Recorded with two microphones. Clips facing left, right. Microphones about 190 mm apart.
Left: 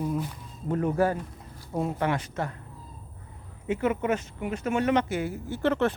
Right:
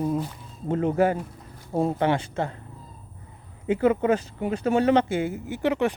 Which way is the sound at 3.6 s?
30° right (ahead or behind).